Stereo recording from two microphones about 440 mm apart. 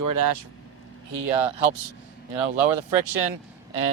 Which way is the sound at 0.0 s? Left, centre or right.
Right.